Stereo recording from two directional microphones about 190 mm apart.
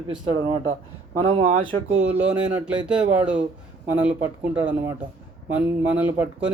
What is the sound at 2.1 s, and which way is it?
Speech, 5° right (ahead or behind).